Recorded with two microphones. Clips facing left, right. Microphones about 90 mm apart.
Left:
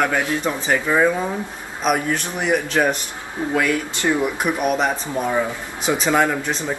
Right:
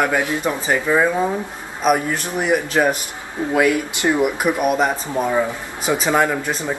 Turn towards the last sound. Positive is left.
turn(degrees=0)  # may be behind; listen again after turning